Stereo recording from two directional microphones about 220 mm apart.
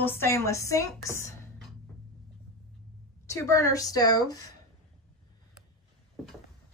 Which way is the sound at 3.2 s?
15° left (ahead or behind).